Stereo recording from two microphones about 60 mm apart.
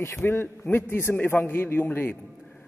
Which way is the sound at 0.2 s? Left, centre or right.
Left.